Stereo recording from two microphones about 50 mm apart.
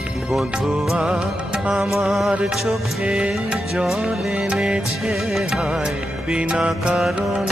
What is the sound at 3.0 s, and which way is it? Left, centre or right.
Music, centre.